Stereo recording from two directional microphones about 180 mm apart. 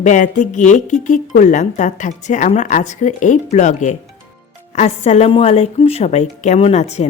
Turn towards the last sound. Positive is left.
turn(degrees=35)  # may be behind; listen again after turning